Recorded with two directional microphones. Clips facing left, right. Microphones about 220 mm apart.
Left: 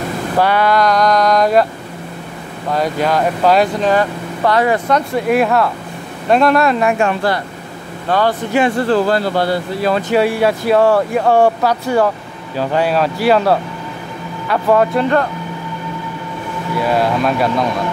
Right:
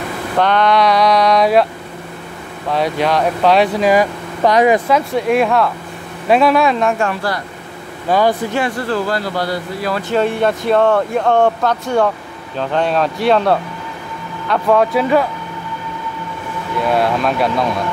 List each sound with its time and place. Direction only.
0.4 s speech: 5° left (ahead or behind)
2.7 s speech: centre (ahead or behind); by 4.8 s 15° right (ahead or behind)
4.8 s speech: centre (ahead or behind)
6.9 s speech: 20° left (ahead or behind)
8.1 s speech: 10° right (ahead or behind)
8.5 s speech: 25° left (ahead or behind)
10.1 s speech: 10° left (ahead or behind)
16.8 s speech: centre (ahead or behind)